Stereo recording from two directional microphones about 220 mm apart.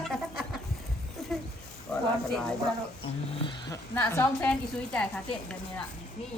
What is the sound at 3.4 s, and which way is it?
A woman's voice, 15° left (ahead or behind).